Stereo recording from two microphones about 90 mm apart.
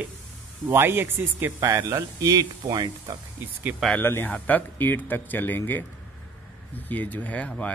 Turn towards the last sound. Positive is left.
turn(degrees=15)  # may be behind; listen again after turning